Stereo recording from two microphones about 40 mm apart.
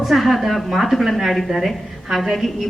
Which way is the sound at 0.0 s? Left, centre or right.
Centre.